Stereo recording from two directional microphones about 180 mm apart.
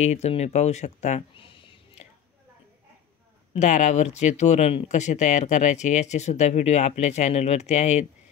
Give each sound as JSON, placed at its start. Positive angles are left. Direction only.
{"t": 0.0, "sound": "speech", "side_deg": 40}
{"t": 3.5, "sound": "speech", "side_deg": 40}